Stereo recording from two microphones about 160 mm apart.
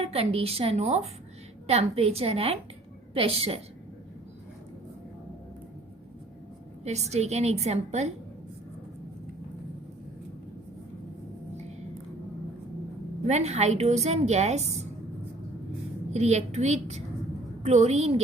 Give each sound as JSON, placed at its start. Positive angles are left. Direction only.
{"t": 0.0, "sound": "a woman's voice", "side_deg": -40}
{"t": 6.8, "sound": "a woman's voice", "side_deg": -45}
{"t": 13.2, "sound": "a woman's voice", "side_deg": -45}
{"t": 16.1, "sound": "a woman's voice", "side_deg": -45}